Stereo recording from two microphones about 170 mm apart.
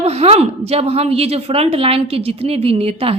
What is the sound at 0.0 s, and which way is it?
A woman's voice, 40° right (ahead or behind).